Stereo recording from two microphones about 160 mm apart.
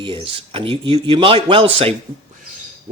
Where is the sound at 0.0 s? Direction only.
30° right (ahead or behind).